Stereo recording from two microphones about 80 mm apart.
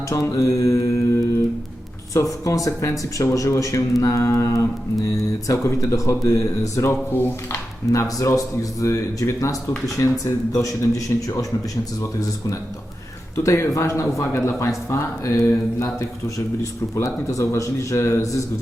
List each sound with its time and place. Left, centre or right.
0.1 s mantra: left
2.5 s speech: left
7.9 s speech: left
13.3 s speech: left